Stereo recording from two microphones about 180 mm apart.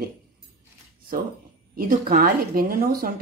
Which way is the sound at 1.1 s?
50° right (ahead or behind).